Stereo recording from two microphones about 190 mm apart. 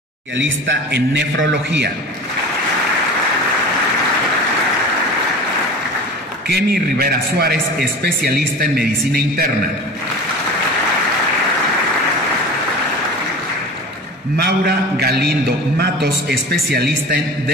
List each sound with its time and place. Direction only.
0.4 s a man's voice: 75° right (ahead or behind)
6.5 s a man's voice: 55° right (ahead or behind)
14.3 s a man's voice: 55° right (ahead or behind)